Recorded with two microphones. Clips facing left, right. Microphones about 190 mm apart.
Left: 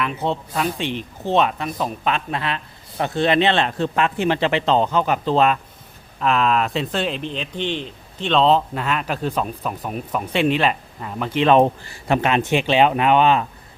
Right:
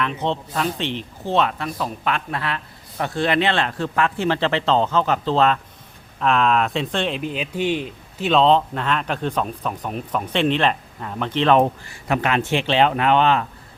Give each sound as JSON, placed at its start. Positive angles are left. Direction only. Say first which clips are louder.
{"t": 0.0, "sound": "speech", "louder": "even", "side_deg": 10}
{"t": 6.1, "sound": "a man's voice", "louder": "even", "side_deg": 0}
{"t": 11.8, "sound": "speech", "louder": "left 2 dB", "side_deg": 30}